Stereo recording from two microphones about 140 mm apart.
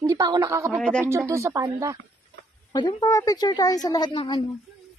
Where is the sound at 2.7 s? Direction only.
30° left (ahead or behind).